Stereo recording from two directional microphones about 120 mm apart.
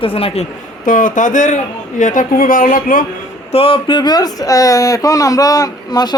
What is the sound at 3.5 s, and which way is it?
Speech, 50° left (ahead or behind).